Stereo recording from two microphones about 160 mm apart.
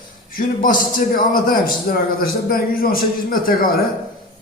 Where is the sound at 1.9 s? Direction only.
65° left (ahead or behind).